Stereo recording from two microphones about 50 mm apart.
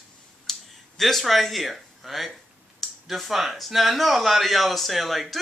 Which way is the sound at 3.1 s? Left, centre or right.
Centre.